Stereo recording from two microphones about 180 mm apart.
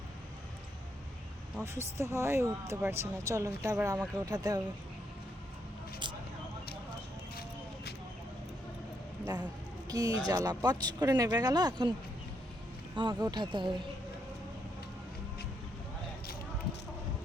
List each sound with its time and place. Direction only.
1.6 s speech: 15° right (ahead or behind)
9.2 s a sound: 20° right (ahead or behind)
9.9 s speech: 20° right (ahead or behind)
13.0 s speech: 20° right (ahead or behind)